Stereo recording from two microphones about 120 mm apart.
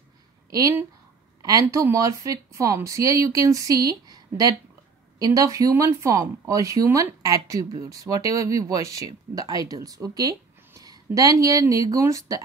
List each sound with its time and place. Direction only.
0.5 s speech: 30° right (ahead or behind)